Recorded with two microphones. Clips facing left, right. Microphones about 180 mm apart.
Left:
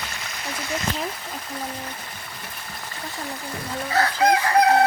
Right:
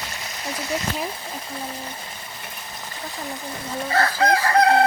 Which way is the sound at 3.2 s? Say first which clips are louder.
Even; centre (ahead or behind).